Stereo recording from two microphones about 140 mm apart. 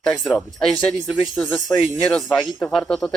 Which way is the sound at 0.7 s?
10° left (ahead or behind).